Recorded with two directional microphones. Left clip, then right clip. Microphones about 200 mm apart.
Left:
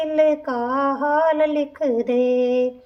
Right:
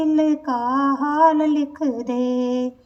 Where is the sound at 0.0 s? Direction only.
35° left (ahead or behind).